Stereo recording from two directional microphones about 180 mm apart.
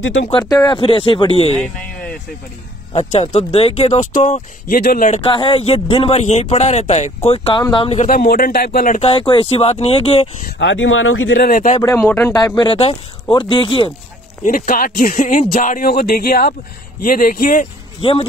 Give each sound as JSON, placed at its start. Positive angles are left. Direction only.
{"t": 0.0, "sound": "speech", "side_deg": 90}
{"t": 0.3, "sound": "speech", "side_deg": 20}
{"t": 1.6, "sound": "a sound", "side_deg": 5}
{"t": 2.9, "sound": "speech", "side_deg": 35}
{"t": 5.2, "sound": "speech", "side_deg": 30}
{"t": 8.1, "sound": "speech", "side_deg": 50}
{"t": 9.0, "sound": "speech", "side_deg": 30}
{"t": 10.6, "sound": "speech", "side_deg": 90}
{"t": 11.3, "sound": "speech", "side_deg": 50}
{"t": 11.8, "sound": "speech", "side_deg": 10}
{"t": 12.5, "sound": "speech", "side_deg": 30}
{"t": 14.4, "sound": "speech", "side_deg": 50}